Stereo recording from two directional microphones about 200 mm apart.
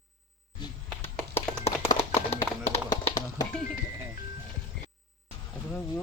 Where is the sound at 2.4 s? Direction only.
20° left (ahead or behind).